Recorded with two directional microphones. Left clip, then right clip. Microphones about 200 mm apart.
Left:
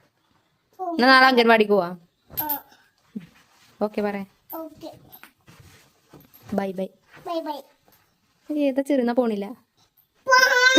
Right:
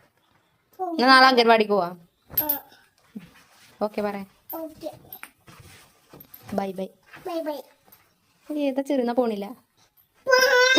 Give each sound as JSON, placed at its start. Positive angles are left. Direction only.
{"t": 0.9, "sound": "a woman's voice", "side_deg": 30}
{"t": 2.4, "sound": "babbling", "side_deg": 15}
{"t": 3.8, "sound": "a woman's voice", "side_deg": 25}
{"t": 6.6, "sound": "a woman's voice", "side_deg": 25}
{"t": 7.3, "sound": "a child's voice", "side_deg": 10}
{"t": 8.5, "sound": "a woman's voice", "side_deg": 25}
{"t": 10.2, "sound": "babbling", "side_deg": 15}